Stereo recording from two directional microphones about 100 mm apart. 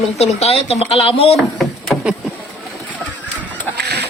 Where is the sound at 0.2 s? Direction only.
90° left.